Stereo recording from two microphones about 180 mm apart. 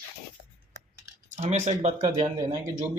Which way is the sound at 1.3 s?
40° right (ahead or behind).